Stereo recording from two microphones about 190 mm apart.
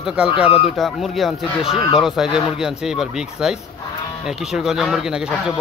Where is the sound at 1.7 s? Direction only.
25° left (ahead or behind).